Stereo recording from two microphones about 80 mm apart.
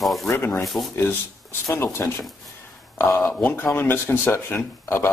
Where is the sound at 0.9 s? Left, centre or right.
Left.